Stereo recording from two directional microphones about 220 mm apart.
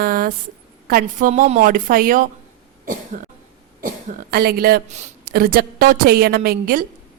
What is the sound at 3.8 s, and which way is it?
Speech, 40° right (ahead or behind).